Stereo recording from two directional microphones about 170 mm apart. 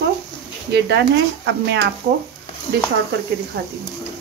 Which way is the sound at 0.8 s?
90° right.